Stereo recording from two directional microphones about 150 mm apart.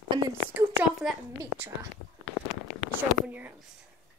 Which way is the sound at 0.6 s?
15° right (ahead or behind).